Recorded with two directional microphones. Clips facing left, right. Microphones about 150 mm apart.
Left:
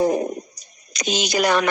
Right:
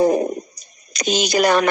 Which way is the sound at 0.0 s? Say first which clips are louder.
Right 3 dB; 45° right (ahead or behind).